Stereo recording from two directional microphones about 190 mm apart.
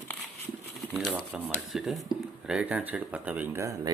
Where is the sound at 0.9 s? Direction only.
Centre (ahead or behind).